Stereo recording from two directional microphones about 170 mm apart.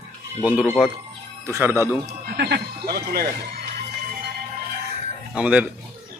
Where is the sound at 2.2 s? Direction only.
65° right (ahead or behind).